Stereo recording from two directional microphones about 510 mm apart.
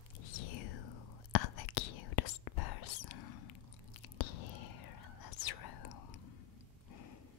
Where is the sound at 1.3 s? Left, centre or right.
Left.